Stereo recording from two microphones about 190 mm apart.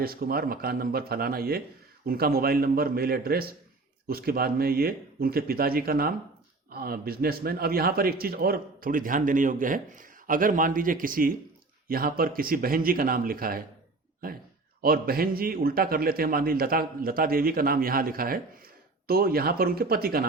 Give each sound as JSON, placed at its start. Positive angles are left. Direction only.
{"t": 0.0, "sound": "a man's voice", "side_deg": -50}
{"t": 14.8, "sound": "a man's voice", "side_deg": -50}